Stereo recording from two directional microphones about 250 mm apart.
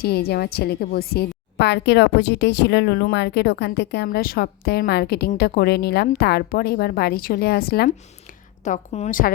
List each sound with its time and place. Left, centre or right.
0.0 s a woman's voice: left